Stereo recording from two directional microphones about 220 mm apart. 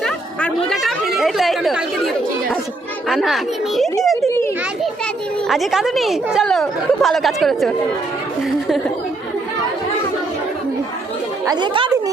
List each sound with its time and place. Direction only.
0.0 s chatter: 5° left (ahead or behind)
3.1 s a woman's voice: centre (ahead or behind)
4.0 s children playing: centre (ahead or behind)
5.5 s a woman's voice: centre (ahead or behind)
11.4 s speech: 20° right (ahead or behind)